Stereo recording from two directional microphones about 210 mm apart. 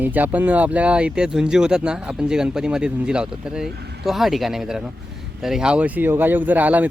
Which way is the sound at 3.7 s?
50° right (ahead or behind).